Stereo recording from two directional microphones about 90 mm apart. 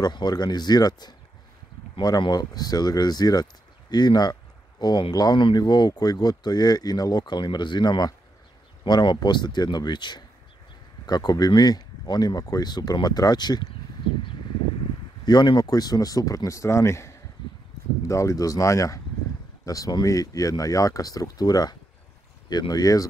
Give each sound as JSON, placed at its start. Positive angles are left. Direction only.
{"t": 0.0, "sound": "speech", "side_deg": 50}
{"t": 15.2, "sound": "speech", "side_deg": 50}